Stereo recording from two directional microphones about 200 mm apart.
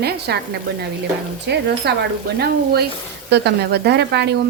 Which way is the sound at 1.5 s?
55° right (ahead or behind).